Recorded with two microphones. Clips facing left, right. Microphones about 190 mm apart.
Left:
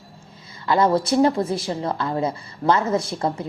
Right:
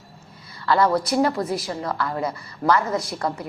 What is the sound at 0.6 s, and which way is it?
A woman's voice, 20° left (ahead or behind).